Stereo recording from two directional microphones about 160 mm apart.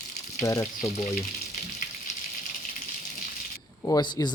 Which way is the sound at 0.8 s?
40° left (ahead or behind).